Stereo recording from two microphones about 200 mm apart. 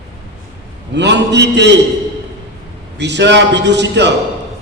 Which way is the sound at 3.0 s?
60° right (ahead or behind).